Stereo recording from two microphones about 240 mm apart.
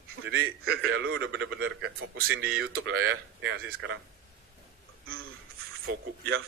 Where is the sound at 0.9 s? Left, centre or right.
Right.